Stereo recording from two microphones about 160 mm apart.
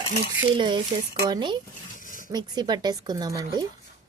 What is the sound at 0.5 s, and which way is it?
Speech, 30° right (ahead or behind).